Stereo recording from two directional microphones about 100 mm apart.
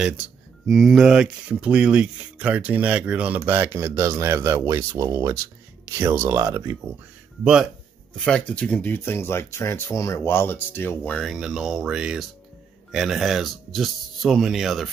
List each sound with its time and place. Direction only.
0.7 s speech: centre (ahead or behind); by 5.3 s 35° right (ahead or behind)
5.9 s speech: 20° right (ahead or behind)
8.2 s speech: 10° left (ahead or behind)
11.1 s speech: centre (ahead or behind)